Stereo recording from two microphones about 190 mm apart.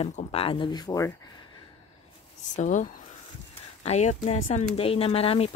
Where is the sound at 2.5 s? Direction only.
40° left (ahead or behind).